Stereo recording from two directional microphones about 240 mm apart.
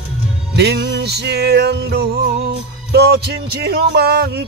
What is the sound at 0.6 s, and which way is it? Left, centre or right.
Music, right.